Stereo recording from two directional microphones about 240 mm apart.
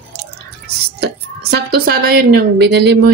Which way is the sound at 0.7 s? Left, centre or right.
Right.